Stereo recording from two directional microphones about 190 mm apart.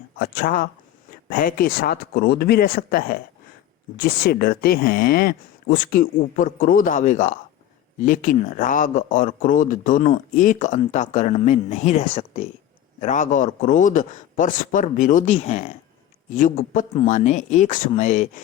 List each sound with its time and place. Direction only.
0.2 s speech: 50° left (ahead or behind)